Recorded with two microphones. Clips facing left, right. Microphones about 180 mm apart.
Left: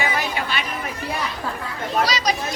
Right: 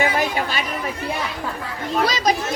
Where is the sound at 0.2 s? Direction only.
40° right (ahead or behind).